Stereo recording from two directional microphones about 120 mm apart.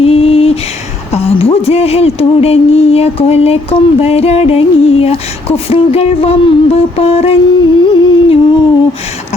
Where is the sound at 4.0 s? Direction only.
60° left (ahead or behind).